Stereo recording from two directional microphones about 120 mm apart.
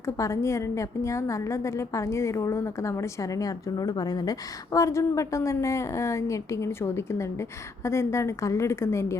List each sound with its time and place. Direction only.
0.0 s a woman's voice: 25° left (ahead or behind)